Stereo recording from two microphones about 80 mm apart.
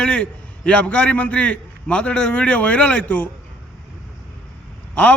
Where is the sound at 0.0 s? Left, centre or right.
Centre.